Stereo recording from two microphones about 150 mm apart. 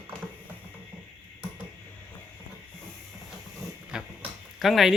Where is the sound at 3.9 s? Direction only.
5° right (ahead or behind).